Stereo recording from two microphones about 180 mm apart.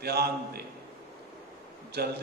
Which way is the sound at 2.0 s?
60° right (ahead or behind).